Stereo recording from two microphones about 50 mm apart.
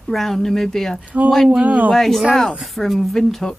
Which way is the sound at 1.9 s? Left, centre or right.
Centre.